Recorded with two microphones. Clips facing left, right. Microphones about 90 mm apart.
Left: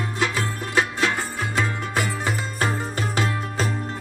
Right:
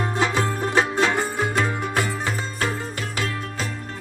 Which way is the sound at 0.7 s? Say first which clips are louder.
Right 1 dB; 15° right (ahead or behind).